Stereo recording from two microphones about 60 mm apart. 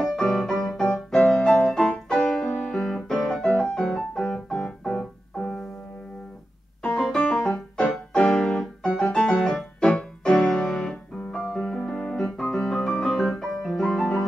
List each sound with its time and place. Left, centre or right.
0.0 s music: centre
1.7 s piano: centre
3.3 s music: centre
6.9 s piano: centre
7.2 s music: centre
7.5 s music: centre
8.1 s piano: centre
9.8 s music: centre
11.3 s piano: centre